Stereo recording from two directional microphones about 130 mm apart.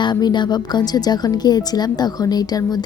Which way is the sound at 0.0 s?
35° left (ahead or behind).